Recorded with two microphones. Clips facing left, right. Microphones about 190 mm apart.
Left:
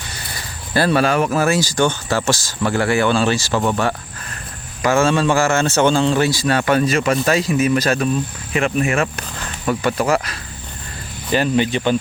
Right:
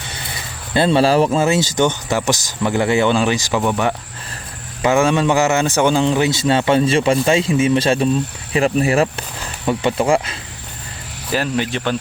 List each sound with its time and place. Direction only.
0.7 s a man's voice: 25° right (ahead or behind)
4.8 s a man's voice: 15° right (ahead or behind)
11.3 s speech: centre (ahead or behind)